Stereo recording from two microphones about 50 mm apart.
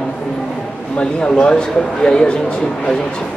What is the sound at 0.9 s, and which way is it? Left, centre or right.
A man's voice, centre.